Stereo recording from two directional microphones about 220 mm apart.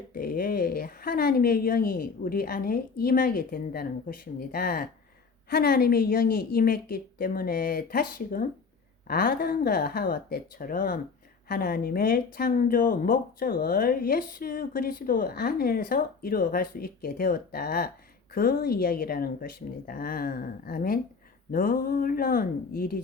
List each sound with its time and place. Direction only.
0.1 s a woman's voice: 40° left (ahead or behind)